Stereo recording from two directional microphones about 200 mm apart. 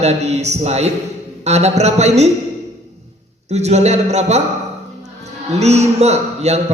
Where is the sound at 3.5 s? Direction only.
35° right (ahead or behind).